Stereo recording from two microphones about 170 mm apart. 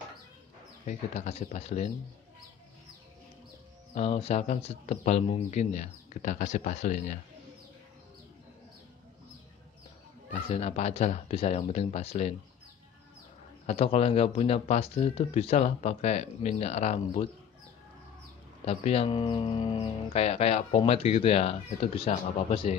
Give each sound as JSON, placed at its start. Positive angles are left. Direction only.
{"t": 0.8, "sound": "speech", "side_deg": 40}
{"t": 3.9, "sound": "speech", "side_deg": 40}
{"t": 10.3, "sound": "speech", "side_deg": 40}
{"t": 13.7, "sound": "speech", "side_deg": 40}
{"t": 18.7, "sound": "speech", "side_deg": 35}